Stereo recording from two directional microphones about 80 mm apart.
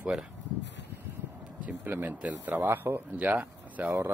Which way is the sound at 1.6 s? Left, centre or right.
Right.